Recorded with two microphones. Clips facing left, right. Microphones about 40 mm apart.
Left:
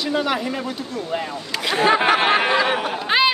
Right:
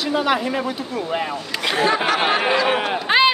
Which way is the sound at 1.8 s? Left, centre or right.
Left.